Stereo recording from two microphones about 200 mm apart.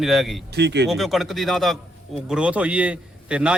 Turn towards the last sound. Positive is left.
turn(degrees=-5)  # may be behind; listen again after turning